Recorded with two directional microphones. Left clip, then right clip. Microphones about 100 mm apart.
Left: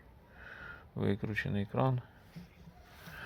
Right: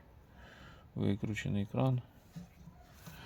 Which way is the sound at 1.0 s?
10° right (ahead or behind).